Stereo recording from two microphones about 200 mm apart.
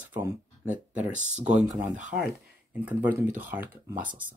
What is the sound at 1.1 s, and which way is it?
Speech, 35° right (ahead or behind).